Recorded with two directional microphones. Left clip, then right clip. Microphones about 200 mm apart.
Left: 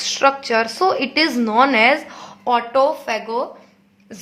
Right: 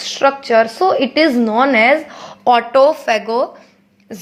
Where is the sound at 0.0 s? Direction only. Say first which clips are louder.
Right 2 dB; 10° right (ahead or behind).